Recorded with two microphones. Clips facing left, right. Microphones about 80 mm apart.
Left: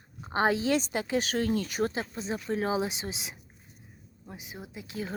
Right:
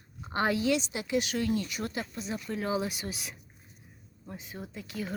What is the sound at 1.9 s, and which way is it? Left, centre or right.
Speech, left.